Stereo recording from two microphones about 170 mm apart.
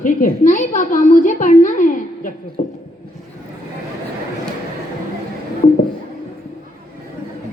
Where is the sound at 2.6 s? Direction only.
40° left (ahead or behind).